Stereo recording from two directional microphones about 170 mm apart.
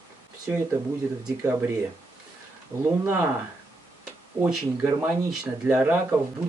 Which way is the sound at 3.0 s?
15° right (ahead or behind).